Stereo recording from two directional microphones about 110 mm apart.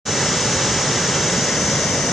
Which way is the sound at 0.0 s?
Centre (ahead or behind).